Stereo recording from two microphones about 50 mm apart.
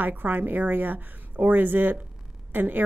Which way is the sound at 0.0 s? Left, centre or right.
Right.